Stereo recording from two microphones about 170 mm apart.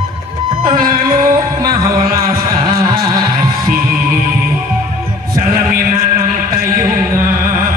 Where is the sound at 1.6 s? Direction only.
20° right (ahead or behind).